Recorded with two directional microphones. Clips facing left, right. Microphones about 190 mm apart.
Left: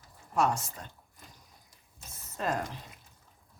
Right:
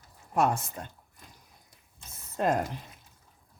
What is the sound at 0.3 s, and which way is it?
Speech, 55° right (ahead or behind).